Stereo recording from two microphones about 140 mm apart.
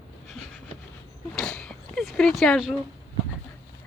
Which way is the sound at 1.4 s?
5° left (ahead or behind).